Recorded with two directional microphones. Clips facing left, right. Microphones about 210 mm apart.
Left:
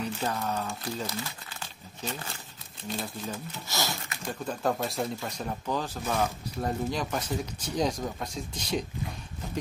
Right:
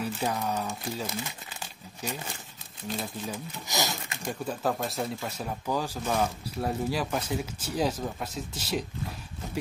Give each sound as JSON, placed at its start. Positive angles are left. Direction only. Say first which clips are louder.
{"t": 0.0, "sound": "speech", "louder": "right 1 dB", "side_deg": -10}
{"t": 3.6, "sound": "speech", "louder": "right 2 dB", "side_deg": -15}
{"t": 4.5, "sound": "speech", "louder": "left 1 dB", "side_deg": 0}